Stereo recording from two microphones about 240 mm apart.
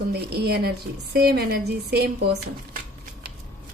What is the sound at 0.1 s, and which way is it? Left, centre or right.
A woman's voice, right.